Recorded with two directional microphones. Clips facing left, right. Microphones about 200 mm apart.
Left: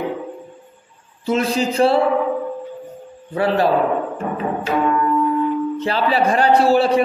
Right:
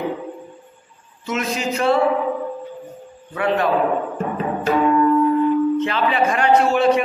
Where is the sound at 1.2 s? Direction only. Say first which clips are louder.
Left 5 dB; 30° left (ahead or behind).